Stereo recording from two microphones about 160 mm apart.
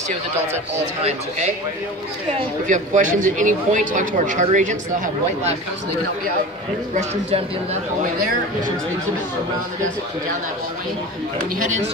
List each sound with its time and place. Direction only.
2.3 s speech: 50° right (ahead or behind)
7.0 s speech: 40° right (ahead or behind)
8.0 s speech: 55° right (ahead or behind)
11.6 s speech: 50° right (ahead or behind)